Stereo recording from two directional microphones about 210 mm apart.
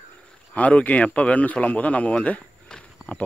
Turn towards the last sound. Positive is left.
turn(degrees=5)  # may be behind; listen again after turning